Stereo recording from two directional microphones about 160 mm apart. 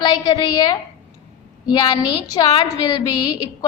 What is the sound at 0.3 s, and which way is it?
Speech, 25° left (ahead or behind).